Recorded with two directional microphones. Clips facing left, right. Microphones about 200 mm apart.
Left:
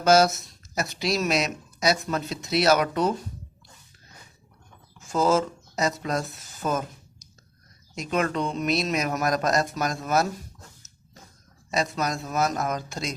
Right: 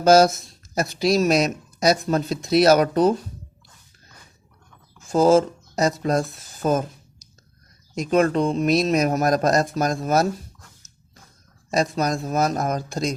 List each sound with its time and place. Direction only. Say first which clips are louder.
0.0 s speech: right 4 dB; 35° right (ahead or behind)
0.8 s speech: right 7 dB; 45° right (ahead or behind)
5.0 s speech: right 6 dB; 30° right (ahead or behind)
7.9 s speech: right 7 dB; 35° right (ahead or behind)
11.8 s speech: right 5 dB; 35° right (ahead or behind)